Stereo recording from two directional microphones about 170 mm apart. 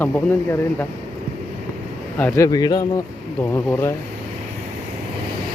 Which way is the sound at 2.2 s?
20° left (ahead or behind).